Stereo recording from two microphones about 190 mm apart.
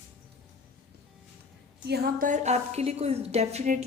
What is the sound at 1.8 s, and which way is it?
A woman's voice, 50° right (ahead or behind).